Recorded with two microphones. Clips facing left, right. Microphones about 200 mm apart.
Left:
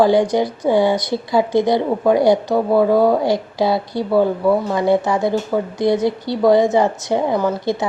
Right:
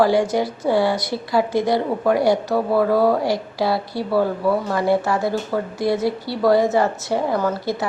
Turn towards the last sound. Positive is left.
turn(degrees=20)  # may be behind; listen again after turning